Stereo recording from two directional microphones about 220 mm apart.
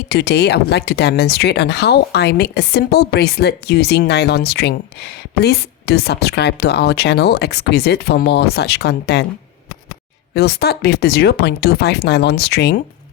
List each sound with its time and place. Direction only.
0.1 s speech: 50° left (ahead or behind)
10.3 s speech: 45° left (ahead or behind)